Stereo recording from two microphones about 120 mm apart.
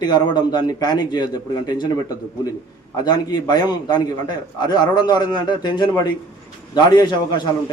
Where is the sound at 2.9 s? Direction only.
35° left (ahead or behind).